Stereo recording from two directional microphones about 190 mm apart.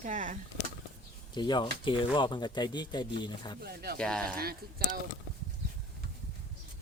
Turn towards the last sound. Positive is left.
turn(degrees=-50)  # may be behind; listen again after turning